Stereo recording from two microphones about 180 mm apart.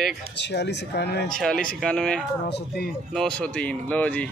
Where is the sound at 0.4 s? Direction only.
70° left (ahead or behind).